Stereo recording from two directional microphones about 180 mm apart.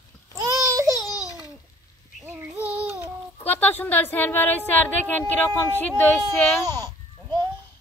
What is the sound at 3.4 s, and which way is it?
A woman's voice, 10° left (ahead or behind).